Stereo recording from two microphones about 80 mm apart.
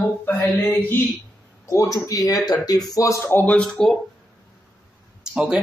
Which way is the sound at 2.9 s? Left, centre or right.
Left.